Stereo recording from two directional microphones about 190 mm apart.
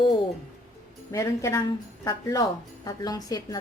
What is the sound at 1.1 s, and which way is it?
A woman's voice, 15° left (ahead or behind).